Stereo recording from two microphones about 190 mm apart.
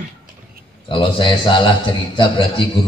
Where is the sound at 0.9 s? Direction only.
25° left (ahead or behind).